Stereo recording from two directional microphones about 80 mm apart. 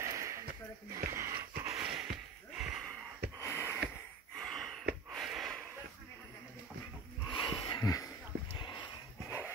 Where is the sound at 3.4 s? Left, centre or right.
Left.